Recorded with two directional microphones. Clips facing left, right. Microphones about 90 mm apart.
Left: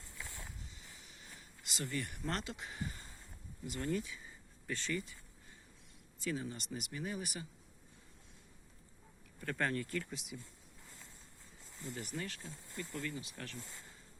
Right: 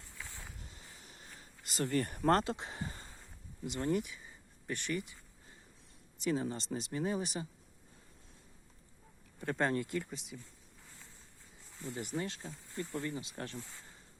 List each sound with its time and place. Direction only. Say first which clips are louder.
1.0 s speech: right 2 dB; 40° right (ahead or behind); by 5.1 s 20° right (ahead or behind)
6.1 s speech: right 6 dB; 20° right (ahead or behind)
6.4 s speech: right 6 dB; 40° right (ahead or behind)
9.4 s speech: right 4 dB; 25° right (ahead or behind)
10.1 s speech: right 1 dB; centre (ahead or behind)
11.9 s speech: right 6 dB; 25° right (ahead or behind)